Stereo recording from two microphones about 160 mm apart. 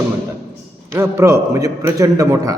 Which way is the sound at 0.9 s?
15° right (ahead or behind).